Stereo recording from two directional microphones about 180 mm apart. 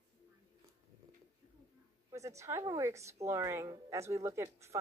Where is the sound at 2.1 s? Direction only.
15° right (ahead or behind).